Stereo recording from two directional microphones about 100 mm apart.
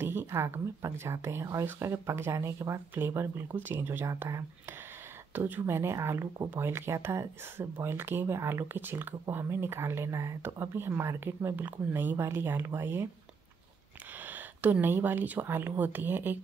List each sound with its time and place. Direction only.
0.0 s speech: 20° right (ahead or behind)
14.2 s speech: 15° right (ahead or behind)